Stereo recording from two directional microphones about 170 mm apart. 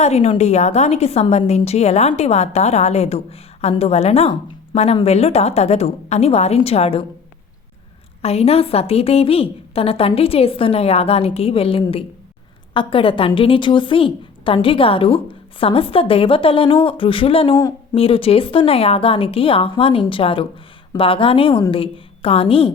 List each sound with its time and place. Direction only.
0.0 s a woman's voice: 40° left (ahead or behind)
8.2 s a woman's voice: 35° left (ahead or behind)